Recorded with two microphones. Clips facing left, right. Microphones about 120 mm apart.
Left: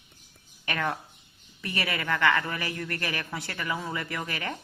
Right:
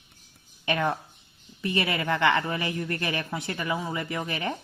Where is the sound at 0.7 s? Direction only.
20° right (ahead or behind).